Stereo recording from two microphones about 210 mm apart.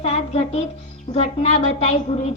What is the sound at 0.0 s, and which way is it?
A woman's voice, 30° left (ahead or behind).